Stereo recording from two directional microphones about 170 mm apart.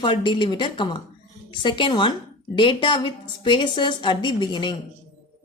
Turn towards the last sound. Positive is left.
turn(degrees=25)  # may be behind; listen again after turning